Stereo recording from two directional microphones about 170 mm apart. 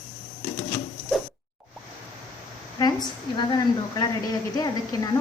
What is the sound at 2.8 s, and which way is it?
A woman's voice, 25° left (ahead or behind).